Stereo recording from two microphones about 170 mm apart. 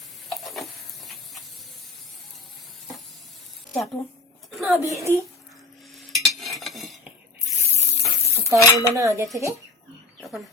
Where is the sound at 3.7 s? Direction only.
Centre (ahead or behind).